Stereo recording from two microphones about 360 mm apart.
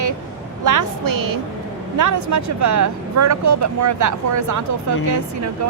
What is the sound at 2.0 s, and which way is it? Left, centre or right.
Speech, right.